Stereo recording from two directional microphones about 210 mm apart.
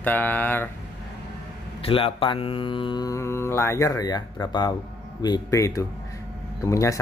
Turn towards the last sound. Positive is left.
turn(degrees=15)  # may be behind; listen again after turning